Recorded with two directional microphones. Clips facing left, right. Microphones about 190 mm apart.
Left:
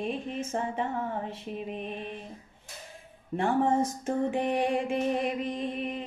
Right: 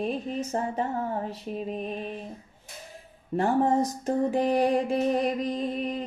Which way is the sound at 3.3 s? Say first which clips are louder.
Right 2 dB; 35° right (ahead or behind).